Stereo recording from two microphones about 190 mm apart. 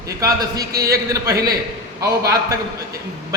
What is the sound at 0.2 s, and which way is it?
A man's voice, 15° right (ahead or behind).